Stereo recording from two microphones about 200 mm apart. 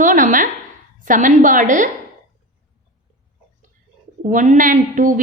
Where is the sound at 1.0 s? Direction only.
40° right (ahead or behind).